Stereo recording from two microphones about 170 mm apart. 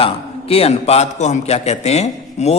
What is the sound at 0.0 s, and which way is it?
A man's voice, 35° left (ahead or behind).